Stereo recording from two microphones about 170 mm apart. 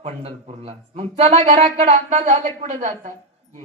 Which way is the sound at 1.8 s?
45° right (ahead or behind).